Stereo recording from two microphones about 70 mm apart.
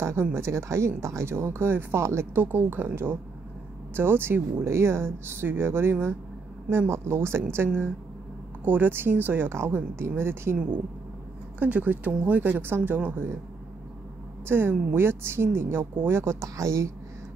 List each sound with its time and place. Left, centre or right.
0.0 s speech: right
11.6 s speech: right
14.5 s speech: right